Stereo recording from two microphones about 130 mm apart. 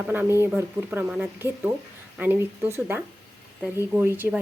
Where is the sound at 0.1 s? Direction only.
15° right (ahead or behind).